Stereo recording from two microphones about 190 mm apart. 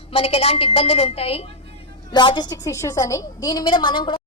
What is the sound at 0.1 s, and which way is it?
A woman's voice, 30° left (ahead or behind).